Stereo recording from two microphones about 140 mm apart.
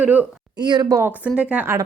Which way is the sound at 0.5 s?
30° right (ahead or behind).